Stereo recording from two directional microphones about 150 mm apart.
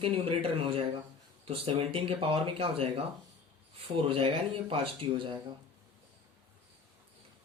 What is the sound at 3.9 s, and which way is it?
Speech, 35° right (ahead or behind).